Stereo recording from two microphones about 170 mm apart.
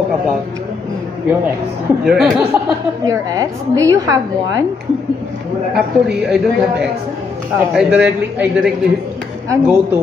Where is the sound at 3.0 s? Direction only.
20° right (ahead or behind).